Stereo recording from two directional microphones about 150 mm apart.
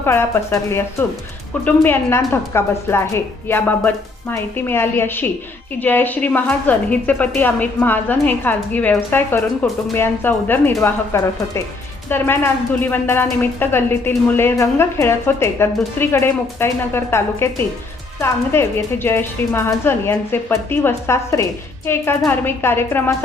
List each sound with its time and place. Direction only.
0.0 s a woman's voice: 15° left (ahead or behind)